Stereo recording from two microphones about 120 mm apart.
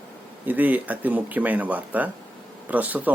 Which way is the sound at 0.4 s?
15° right (ahead or behind).